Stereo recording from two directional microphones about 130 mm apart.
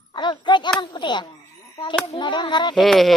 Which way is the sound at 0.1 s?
35° left (ahead or behind).